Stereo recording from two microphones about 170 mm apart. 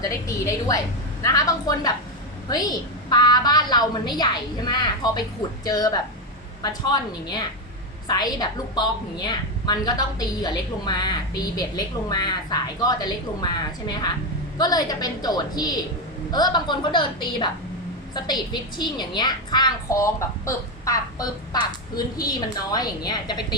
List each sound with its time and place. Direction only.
0.0 s a woman's voice: 20° left (ahead or behind)